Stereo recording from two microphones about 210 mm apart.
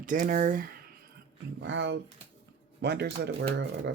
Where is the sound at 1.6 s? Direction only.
60° right (ahead or behind).